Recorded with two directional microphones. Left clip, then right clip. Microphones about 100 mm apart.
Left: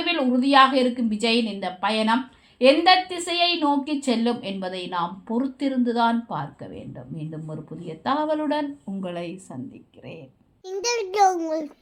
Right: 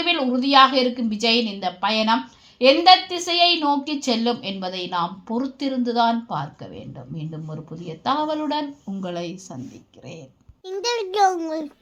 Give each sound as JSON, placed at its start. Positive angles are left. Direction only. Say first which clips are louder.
{"t": 0.0, "sound": "a woman's voice", "louder": "right 1 dB", "side_deg": -40}
{"t": 10.7, "sound": "a child's voice", "louder": "right 1 dB", "side_deg": 25}